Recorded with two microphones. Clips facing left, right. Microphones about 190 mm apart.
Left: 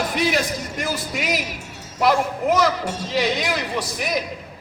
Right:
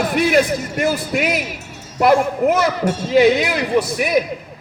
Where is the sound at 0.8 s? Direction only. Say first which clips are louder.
Right 9 dB; 55° right (ahead or behind).